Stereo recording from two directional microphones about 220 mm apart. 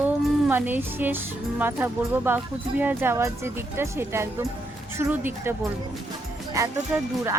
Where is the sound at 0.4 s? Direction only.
10° right (ahead or behind).